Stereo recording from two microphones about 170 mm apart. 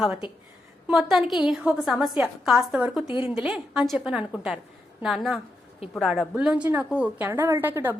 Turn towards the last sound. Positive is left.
turn(degrees=-10)  # may be behind; listen again after turning